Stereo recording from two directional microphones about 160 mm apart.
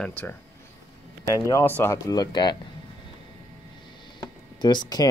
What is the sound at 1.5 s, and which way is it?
Speech, 15° left (ahead or behind).